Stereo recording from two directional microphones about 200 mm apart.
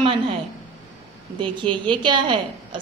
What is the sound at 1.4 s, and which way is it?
A woman's voice, 25° right (ahead or behind).